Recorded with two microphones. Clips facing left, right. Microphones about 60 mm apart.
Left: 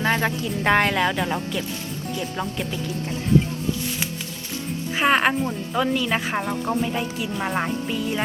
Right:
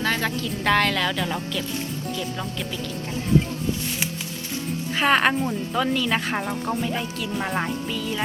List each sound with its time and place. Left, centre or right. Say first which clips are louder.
0.0 s music: left 3 dB; left
0.4 s speech: left 1 dB; left
4.9 s speech: even; centre
5.3 s speech: even; centre
7.9 s speech: left 2 dB; centre